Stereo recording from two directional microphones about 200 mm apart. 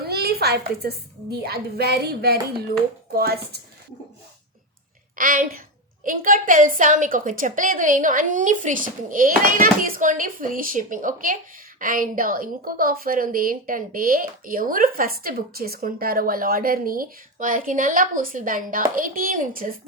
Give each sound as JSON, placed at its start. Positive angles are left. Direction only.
{"t": 0.0, "sound": "a woman's voice", "side_deg": -50}
{"t": 5.1, "sound": "a woman's voice", "side_deg": -45}